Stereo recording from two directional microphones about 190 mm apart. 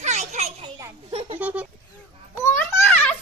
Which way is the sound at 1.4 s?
5° right (ahead or behind).